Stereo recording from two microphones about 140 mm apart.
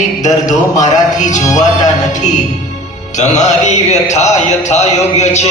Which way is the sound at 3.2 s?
55° left (ahead or behind).